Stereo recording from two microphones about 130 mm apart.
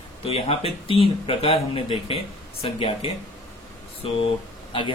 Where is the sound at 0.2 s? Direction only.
45° left (ahead or behind).